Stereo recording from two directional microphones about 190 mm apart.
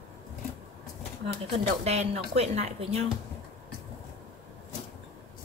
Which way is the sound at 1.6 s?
35° right (ahead or behind).